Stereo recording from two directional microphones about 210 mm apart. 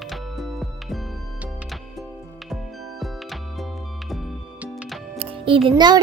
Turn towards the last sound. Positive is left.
turn(degrees=-20)  # may be behind; listen again after turning